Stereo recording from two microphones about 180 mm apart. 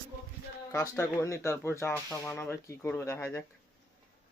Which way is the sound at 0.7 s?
15° left (ahead or behind).